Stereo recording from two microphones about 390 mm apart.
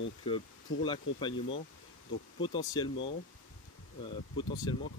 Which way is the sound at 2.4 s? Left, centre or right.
Centre.